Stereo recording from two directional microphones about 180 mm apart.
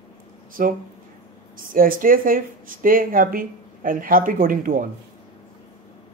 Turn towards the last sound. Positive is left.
turn(degrees=-50)  # may be behind; listen again after turning